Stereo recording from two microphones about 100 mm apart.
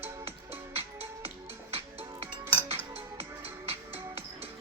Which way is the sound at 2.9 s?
80° right.